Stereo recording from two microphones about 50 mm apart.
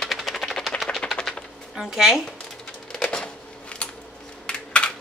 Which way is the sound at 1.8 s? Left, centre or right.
Centre.